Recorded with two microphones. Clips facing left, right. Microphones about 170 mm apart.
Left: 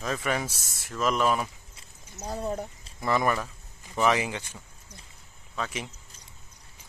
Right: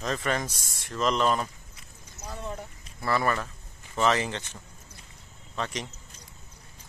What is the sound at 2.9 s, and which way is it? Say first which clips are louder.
Speech: left 1 dB; 15° left (ahead or behind).